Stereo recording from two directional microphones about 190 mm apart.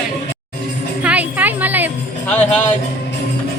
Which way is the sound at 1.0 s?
10° right (ahead or behind).